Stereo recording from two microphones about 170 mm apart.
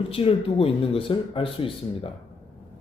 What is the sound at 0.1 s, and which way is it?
Speech, 35° left (ahead or behind).